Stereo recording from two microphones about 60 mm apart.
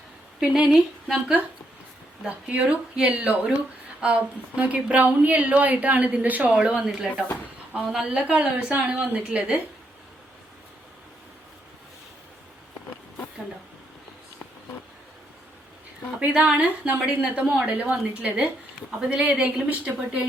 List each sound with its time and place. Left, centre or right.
0.3 s speech: centre
2.2 s a woman's voice: centre
6.5 s a woman's voice: centre
16.2 s a woman's voice: right
18.9 s a woman's voice: centre